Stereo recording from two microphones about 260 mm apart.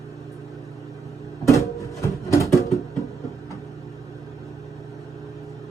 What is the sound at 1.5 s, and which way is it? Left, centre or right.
Music, centre.